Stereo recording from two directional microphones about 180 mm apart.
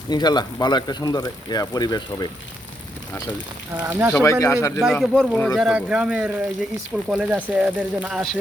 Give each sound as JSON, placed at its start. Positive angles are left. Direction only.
{"t": 0.1, "sound": "speech", "side_deg": 25}
{"t": 3.8, "sound": "speech", "side_deg": -10}
{"t": 4.1, "sound": "speech", "side_deg": 15}
{"t": 4.8, "sound": "speech", "side_deg": 0}